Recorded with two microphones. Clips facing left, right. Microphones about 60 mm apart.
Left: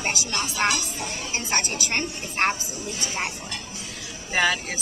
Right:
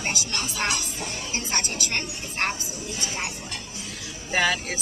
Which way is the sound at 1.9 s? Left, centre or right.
Left.